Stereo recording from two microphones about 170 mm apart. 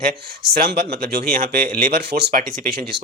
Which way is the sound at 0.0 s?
60° right (ahead or behind).